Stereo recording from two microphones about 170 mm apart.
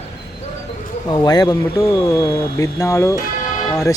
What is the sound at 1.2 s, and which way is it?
Speech, 20° left (ahead or behind).